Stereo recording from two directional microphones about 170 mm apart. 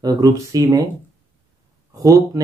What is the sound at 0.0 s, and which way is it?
Speech, 20° right (ahead or behind).